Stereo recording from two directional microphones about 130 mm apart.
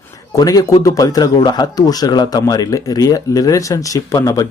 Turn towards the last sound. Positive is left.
turn(degrees=25)  # may be behind; listen again after turning